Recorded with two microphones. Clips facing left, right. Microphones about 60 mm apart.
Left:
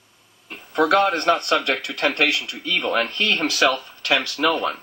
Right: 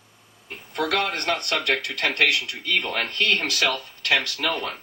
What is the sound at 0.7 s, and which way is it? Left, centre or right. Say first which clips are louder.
A man's voice: left 7 dB; left.